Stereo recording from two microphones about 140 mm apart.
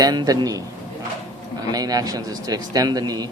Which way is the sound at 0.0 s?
25° right (ahead or behind).